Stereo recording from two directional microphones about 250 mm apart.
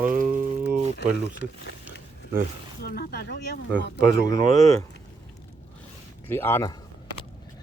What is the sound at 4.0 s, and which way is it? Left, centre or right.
Speech, right.